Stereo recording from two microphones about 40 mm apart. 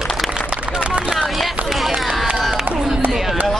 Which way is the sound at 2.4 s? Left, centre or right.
Centre.